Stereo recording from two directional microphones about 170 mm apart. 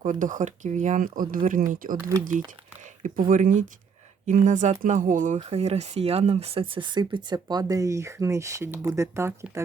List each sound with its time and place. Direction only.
0.0 s speech: 50° right (ahead or behind)
3.0 s speech: 50° right (ahead or behind)
5.4 s speech: 40° right (ahead or behind); by 9.6 s 15° right (ahead or behind)